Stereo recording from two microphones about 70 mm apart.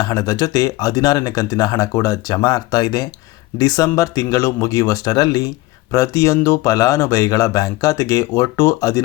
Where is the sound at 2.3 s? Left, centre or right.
Left.